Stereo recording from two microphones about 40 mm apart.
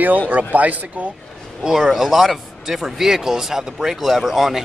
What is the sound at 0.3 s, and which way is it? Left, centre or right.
Speech, right.